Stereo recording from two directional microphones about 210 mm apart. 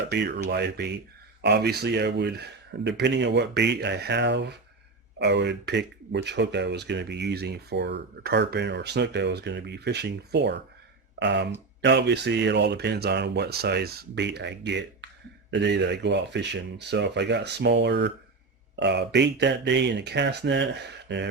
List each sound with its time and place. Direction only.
0.1 s speech: 50° right (ahead or behind)